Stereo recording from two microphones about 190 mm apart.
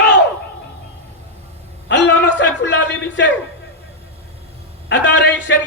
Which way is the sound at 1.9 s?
65° left (ahead or behind).